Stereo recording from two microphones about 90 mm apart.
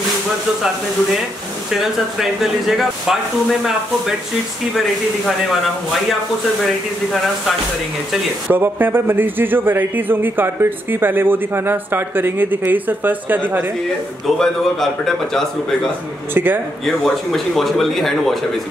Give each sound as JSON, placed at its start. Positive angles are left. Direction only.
{"t": 1.7, "sound": "speech", "side_deg": -5}
{"t": 8.5, "sound": "a man's voice", "side_deg": -20}
{"t": 14.2, "sound": "speech", "side_deg": 5}
{"t": 16.3, "sound": "a man's voice", "side_deg": -20}
{"t": 16.8, "sound": "speech", "side_deg": 0}